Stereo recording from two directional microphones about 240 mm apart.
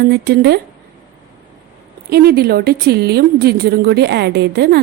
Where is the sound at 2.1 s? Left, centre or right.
Right.